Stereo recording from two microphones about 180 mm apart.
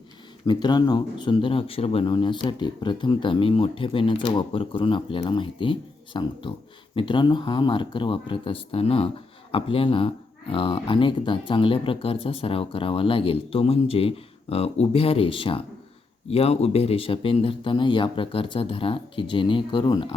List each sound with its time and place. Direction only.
0.4 s speech: 25° left (ahead or behind)